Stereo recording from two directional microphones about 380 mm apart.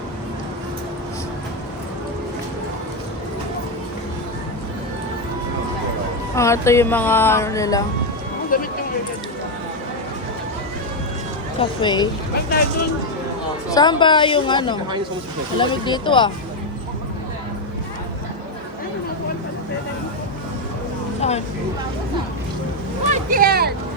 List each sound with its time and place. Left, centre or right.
6.3 s speech: centre
8.5 s speech: left
11.6 s speech: centre
13.7 s speech: centre
21.2 s vehicle: centre
23.1 s a sound: right